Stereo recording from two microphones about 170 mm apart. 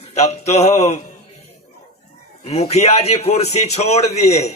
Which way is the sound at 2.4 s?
40° left (ahead or behind).